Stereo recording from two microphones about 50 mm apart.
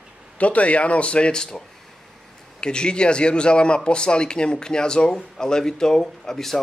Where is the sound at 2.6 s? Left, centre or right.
Centre.